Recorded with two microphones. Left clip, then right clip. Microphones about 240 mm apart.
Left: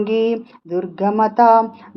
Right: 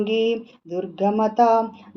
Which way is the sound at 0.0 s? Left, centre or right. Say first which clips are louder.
Left 3 dB; left.